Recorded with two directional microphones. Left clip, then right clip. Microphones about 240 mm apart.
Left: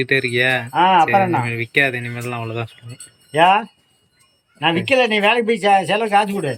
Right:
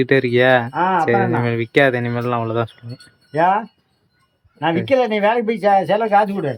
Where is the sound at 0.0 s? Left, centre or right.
Centre.